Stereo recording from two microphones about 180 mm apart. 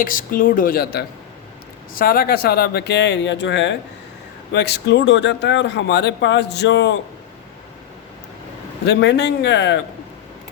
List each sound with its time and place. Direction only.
0.0 s speech: 50° left (ahead or behind); by 3.8 s 85° left
4.5 s speech: 70° left (ahead or behind)
8.9 s speech: 70° left (ahead or behind)